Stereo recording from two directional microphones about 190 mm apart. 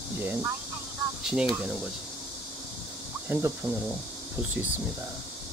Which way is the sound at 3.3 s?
10° right (ahead or behind).